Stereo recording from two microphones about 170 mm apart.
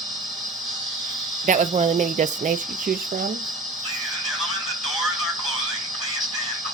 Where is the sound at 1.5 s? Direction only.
45° right (ahead or behind).